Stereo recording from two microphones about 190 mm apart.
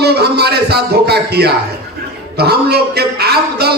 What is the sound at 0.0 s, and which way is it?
A man's voice, 60° right (ahead or behind).